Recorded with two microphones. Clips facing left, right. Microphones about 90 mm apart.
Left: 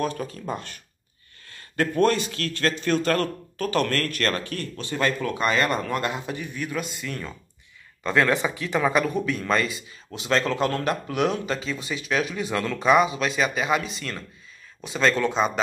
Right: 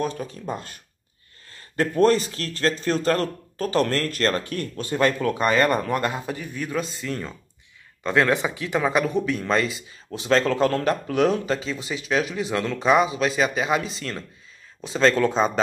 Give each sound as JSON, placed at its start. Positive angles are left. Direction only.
{"t": 0.0, "sound": "speech", "side_deg": -20}
{"t": 1.8, "sound": "speech", "side_deg": -30}
{"t": 4.6, "sound": "speech", "side_deg": -45}